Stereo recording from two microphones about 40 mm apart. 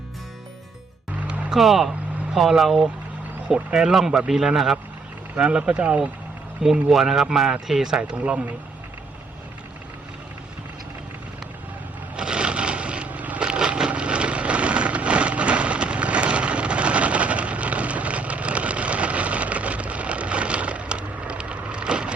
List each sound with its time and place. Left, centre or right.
1.5 s speech: centre
3.5 s a man's voice: centre
5.4 s speech: right
6.6 s speech: right
6.9 s a man's voice: centre
8.1 s speech: right
12.1 s a sound: right
13.1 s vehicle: right
13.4 s wood: right